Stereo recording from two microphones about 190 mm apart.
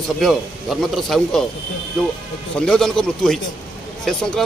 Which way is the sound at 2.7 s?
5° left (ahead or behind).